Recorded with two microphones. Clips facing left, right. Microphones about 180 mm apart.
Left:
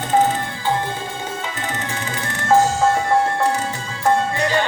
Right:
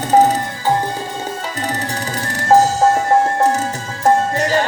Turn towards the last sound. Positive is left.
turn(degrees=-40)  # may be behind; listen again after turning